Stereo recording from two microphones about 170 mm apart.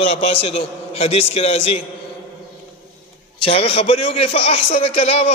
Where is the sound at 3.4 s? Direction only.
35° left (ahead or behind).